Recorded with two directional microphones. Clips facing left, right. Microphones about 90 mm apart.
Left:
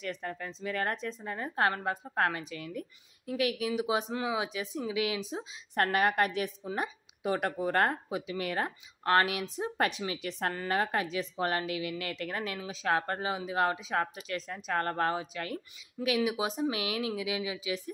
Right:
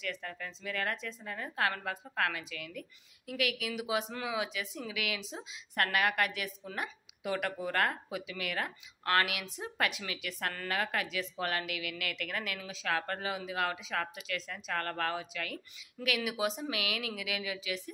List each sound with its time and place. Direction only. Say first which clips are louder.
0.0 s a woman's voice: left 3 dB; 30° left (ahead or behind)
16.7 s speech: left 4 dB; 30° left (ahead or behind)